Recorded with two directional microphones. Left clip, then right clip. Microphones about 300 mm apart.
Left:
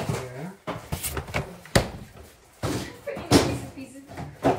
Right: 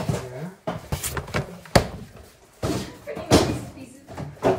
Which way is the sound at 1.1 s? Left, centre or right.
Centre.